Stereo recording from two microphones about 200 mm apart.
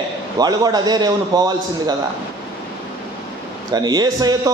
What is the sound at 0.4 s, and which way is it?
A man's voice, 20° right (ahead or behind).